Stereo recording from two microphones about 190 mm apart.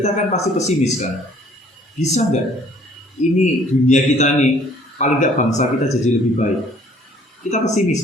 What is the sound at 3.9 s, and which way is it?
A man's voice, 40° left (ahead or behind).